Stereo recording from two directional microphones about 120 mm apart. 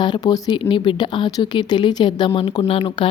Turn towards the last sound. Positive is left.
turn(degrees=50)  # may be behind; listen again after turning